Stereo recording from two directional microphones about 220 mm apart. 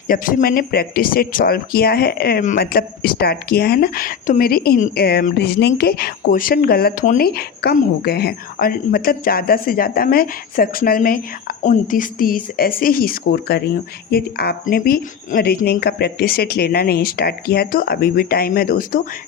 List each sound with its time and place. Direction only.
0.1 s speech: 40° left (ahead or behind)